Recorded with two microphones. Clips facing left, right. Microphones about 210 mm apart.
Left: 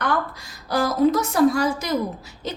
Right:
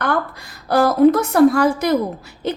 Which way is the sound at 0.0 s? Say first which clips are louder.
Right 3 dB; 60° right (ahead or behind).